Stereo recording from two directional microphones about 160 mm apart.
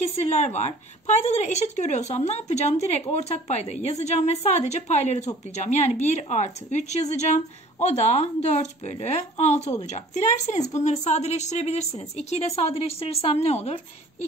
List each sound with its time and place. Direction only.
0.0 s speech: 45° left (ahead or behind)